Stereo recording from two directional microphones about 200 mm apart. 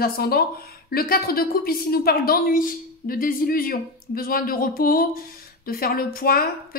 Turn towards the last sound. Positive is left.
turn(degrees=50)  # may be behind; listen again after turning